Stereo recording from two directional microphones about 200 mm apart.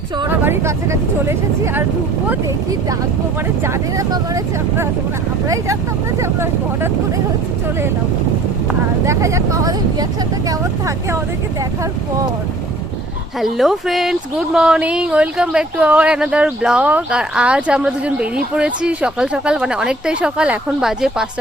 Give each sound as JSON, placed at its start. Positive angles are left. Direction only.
{"t": 0.3, "sound": "speech", "side_deg": -10}
{"t": 3.6, "sound": "speech", "side_deg": -15}
{"t": 6.1, "sound": "speech", "side_deg": -15}
{"t": 9.0, "sound": "speech", "side_deg": -15}
{"t": 13.4, "sound": "speech", "side_deg": 0}